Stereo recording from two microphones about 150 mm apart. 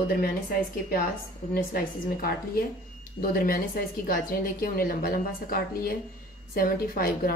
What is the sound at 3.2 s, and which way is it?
A woman's voice, 80° left.